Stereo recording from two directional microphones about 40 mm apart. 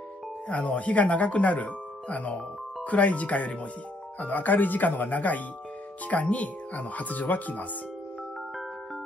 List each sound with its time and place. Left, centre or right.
0.5 s speech: left
4.2 s speech: left